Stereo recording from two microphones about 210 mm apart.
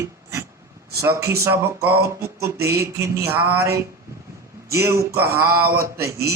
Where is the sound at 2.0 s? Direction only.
50° right (ahead or behind).